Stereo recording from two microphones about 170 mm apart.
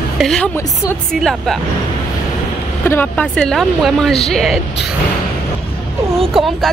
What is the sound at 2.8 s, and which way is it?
Speech, 10° left (ahead or behind).